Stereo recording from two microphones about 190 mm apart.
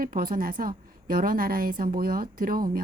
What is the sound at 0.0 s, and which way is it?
A woman's voice, 50° right (ahead or behind).